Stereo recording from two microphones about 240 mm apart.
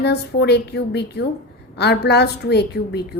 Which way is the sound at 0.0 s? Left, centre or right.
Left.